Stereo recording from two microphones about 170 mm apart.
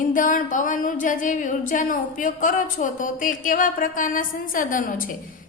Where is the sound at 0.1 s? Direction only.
50° left (ahead or behind).